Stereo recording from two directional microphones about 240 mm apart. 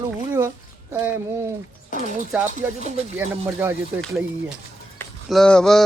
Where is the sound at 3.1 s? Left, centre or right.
Centre.